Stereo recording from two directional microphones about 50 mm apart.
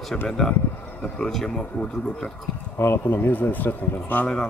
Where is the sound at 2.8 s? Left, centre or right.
Left.